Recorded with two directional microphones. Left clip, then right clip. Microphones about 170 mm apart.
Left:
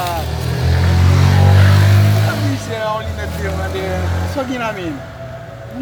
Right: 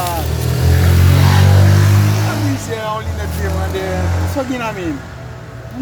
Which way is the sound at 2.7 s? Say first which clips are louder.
Left 4 dB; 5° right (ahead or behind).